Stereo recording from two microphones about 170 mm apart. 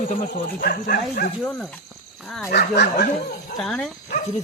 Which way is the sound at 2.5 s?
75° left (ahead or behind).